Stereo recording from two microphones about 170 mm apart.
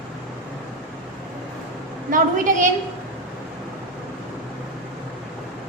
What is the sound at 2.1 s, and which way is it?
Speech, 50° right (ahead or behind).